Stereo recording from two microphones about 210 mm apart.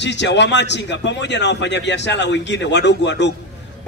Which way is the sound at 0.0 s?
55° left (ahead or behind).